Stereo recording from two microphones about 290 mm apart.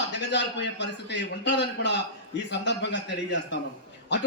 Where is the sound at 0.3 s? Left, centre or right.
Left.